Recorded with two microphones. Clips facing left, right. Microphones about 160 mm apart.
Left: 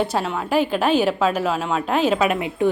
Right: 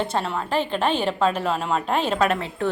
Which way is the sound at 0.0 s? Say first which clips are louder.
Left 3 dB; 5° left (ahead or behind).